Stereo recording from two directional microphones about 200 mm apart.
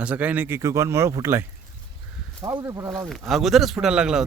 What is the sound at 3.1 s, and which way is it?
A man's voice, centre (ahead or behind).